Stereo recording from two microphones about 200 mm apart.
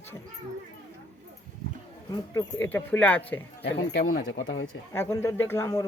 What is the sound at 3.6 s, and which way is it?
Speech, 70° left (ahead or behind).